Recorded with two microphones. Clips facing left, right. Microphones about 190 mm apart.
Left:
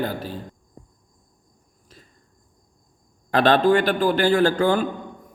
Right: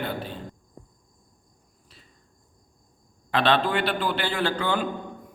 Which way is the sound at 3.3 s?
45° left (ahead or behind).